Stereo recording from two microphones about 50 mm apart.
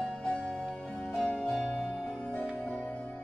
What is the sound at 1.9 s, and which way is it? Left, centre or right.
Music, left.